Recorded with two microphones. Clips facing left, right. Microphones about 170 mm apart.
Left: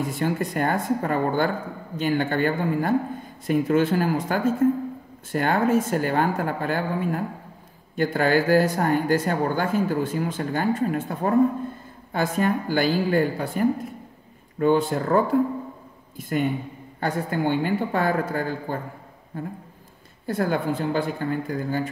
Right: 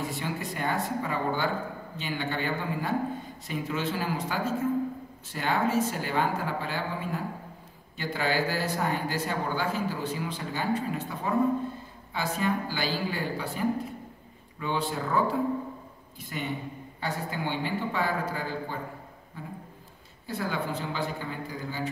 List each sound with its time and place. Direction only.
0.1 s speech: 50° left (ahead or behind)